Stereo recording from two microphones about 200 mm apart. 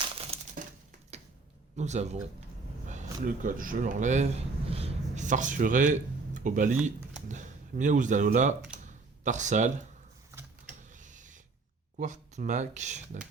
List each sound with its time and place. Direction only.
0.3 s crumpling: 30° right (ahead or behind)
1.7 s speech: 35° right (ahead or behind)
10.9 s a sound: 40° right (ahead or behind)
11.9 s speech: 40° right (ahead or behind)